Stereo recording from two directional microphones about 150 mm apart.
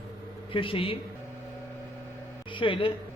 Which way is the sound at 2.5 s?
35° left (ahead or behind).